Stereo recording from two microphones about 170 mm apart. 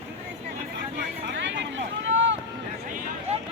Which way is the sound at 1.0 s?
90° right.